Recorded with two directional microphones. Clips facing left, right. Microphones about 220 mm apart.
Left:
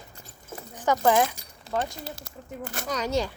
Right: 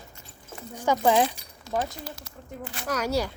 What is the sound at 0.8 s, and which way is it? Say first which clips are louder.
Speech: even; 15° right (ahead or behind).